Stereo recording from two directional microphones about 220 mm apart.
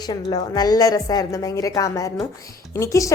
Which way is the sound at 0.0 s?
20° left (ahead or behind).